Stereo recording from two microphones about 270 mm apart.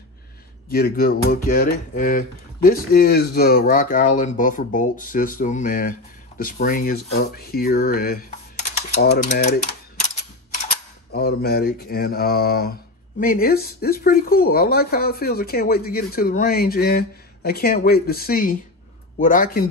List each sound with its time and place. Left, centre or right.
0.7 s speech: left
11.1 s speech: left